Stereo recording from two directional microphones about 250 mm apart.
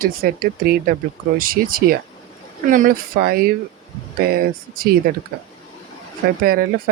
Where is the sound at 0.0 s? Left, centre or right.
Right.